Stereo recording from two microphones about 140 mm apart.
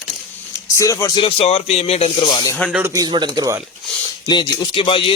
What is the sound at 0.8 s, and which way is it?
Speech, 25° left (ahead or behind).